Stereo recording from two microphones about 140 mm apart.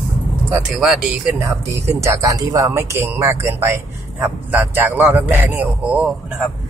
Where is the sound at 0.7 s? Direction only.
5° right (ahead or behind).